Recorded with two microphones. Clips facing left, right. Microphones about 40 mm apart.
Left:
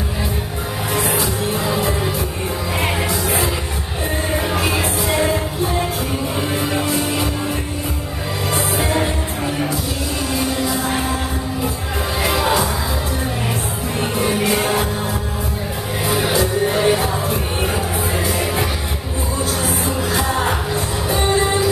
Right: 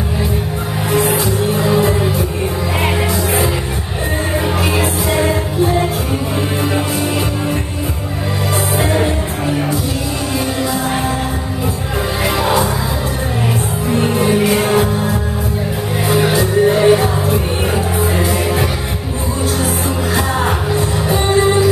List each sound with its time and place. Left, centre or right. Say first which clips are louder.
0.9 s music: right 6 dB; centre
4.6 s music: right 3 dB; centre
8.7 s music: right 5 dB; centre
12.3 s music: right 2 dB; centre
13.9 s music: right 6 dB; centre
20.2 s music: right 2 dB; centre